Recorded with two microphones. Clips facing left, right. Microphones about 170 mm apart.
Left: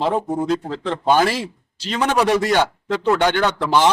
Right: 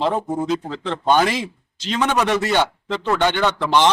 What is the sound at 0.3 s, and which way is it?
A man's voice, 5° left (ahead or behind).